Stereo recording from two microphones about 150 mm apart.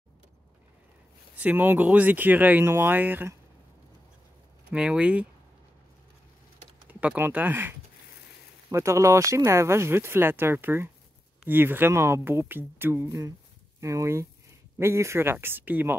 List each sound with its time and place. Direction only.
1.3 s speech: 10° right (ahead or behind)
4.6 s speech: 5° right (ahead or behind)
6.9 s speech: 10° right (ahead or behind)